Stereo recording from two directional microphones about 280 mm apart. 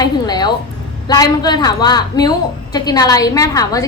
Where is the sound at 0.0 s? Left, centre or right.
Centre.